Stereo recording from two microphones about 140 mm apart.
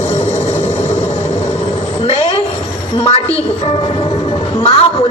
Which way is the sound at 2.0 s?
40° left (ahead or behind).